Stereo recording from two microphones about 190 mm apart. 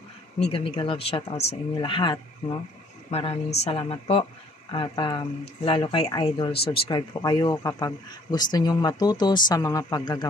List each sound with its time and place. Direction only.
0.4 s speech: 30° left (ahead or behind)